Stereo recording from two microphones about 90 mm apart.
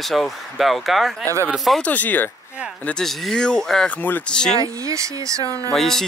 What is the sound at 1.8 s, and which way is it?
Speech, 20° left (ahead or behind).